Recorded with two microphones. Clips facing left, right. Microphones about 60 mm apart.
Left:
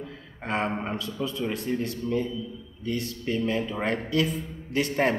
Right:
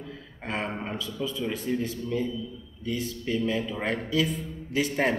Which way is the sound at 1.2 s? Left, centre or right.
Centre.